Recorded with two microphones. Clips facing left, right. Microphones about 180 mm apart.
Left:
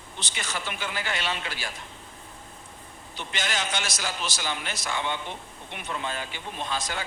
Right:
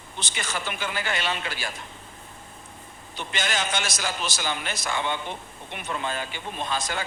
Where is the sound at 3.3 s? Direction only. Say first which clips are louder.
Right 2 dB; 50° right (ahead or behind).